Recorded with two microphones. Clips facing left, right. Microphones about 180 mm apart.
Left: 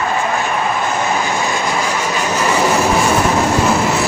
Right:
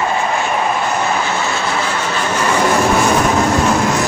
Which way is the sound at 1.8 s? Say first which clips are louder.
Left 1 dB; 10° left (ahead or behind).